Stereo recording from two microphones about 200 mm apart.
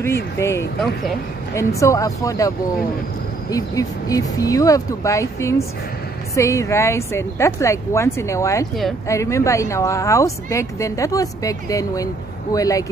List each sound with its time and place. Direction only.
0.0 s speech: 15° left (ahead or behind)
1.8 s speech: 15° left (ahead or behind)